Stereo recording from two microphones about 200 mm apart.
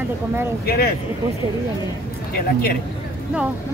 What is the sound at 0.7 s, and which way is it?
Speech, 50° left (ahead or behind).